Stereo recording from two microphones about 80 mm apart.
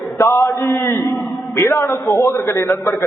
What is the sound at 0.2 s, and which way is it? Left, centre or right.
A man's voice, left.